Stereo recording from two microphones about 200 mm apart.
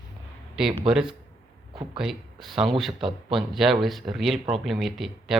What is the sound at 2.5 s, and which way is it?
Speech, 30° right (ahead or behind).